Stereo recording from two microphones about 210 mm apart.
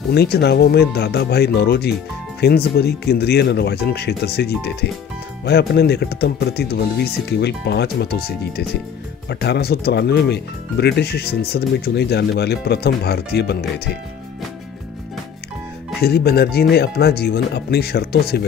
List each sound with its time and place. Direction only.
0.1 s speech: 50° left (ahead or behind)
16.0 s speech: 50° left (ahead or behind)